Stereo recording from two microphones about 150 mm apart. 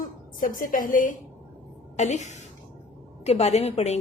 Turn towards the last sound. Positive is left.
turn(degrees=45)  # may be behind; listen again after turning